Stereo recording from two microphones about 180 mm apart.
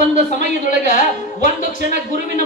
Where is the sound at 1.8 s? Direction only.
65° right (ahead or behind).